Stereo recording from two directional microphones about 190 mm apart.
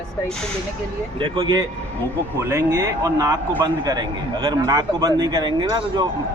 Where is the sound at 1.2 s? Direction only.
25° right (ahead or behind).